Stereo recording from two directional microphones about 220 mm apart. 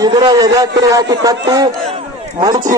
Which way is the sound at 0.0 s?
20° right (ahead or behind).